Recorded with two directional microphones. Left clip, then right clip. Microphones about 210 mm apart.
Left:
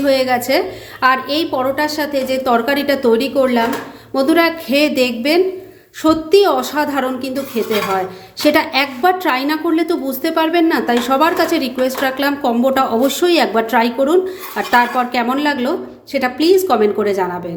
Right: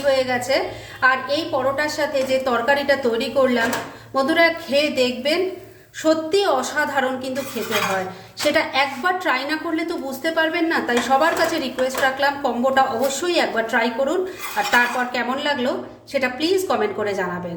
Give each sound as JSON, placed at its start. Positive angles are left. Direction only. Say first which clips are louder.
{"t": 0.1, "sound": "a woman's voice", "louder": "left 4 dB", "side_deg": 40}
{"t": 8.5, "sound": "a woman's voice", "louder": "left 4 dB", "side_deg": 40}